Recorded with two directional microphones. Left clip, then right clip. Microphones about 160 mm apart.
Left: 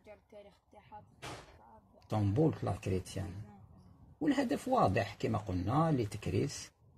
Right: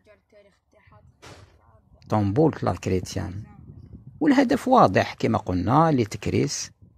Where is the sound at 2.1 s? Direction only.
45° right (ahead or behind).